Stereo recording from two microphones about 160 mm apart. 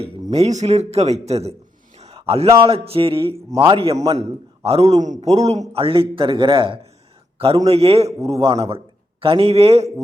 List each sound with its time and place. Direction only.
0.0 s a man's voice: 40° right (ahead or behind)
2.0 s a sound: 40° right (ahead or behind)
2.6 s a man's voice: 35° right (ahead or behind)